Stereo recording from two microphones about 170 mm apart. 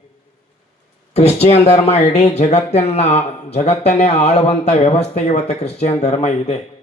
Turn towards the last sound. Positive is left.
turn(degrees=40)  # may be behind; listen again after turning